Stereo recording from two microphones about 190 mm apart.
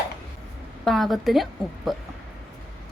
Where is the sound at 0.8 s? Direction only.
Centre (ahead or behind).